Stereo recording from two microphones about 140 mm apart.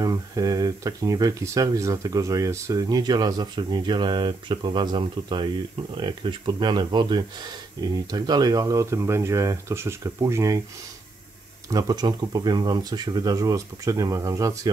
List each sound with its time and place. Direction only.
0.0 s speech: 25° right (ahead or behind)
11.7 s speech: 30° right (ahead or behind)